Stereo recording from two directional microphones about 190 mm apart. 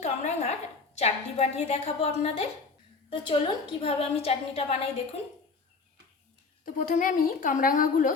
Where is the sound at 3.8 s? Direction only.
30° left (ahead or behind).